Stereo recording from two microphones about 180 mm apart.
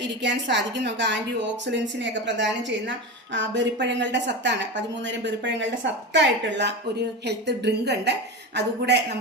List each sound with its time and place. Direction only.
0.0 s a woman's voice: 80° right